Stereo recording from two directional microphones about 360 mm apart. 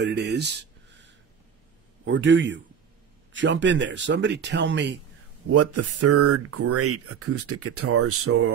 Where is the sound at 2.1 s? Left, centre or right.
Right.